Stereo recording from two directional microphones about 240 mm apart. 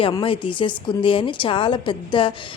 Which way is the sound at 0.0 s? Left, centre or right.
Left.